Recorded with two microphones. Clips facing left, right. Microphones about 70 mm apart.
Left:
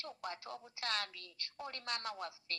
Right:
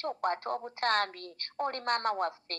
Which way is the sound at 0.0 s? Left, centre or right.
Right.